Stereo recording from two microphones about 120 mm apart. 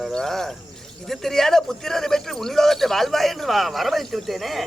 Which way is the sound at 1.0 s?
5° left (ahead or behind).